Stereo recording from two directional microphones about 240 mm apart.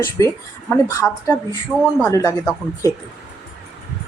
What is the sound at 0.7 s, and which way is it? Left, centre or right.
Speech, centre.